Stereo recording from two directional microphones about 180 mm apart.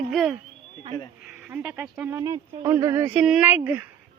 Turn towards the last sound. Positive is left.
turn(degrees=-10)  # may be behind; listen again after turning